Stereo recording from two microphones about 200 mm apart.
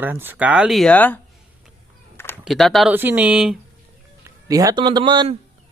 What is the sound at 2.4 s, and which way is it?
Speech, centre (ahead or behind).